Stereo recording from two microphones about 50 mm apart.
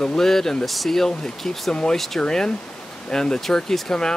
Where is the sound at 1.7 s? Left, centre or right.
Centre.